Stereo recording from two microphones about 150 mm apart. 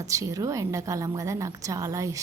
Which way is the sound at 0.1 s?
20° right (ahead or behind).